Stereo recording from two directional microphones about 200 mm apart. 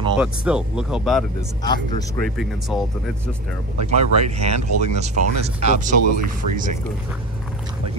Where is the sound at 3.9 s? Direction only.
35° right (ahead or behind).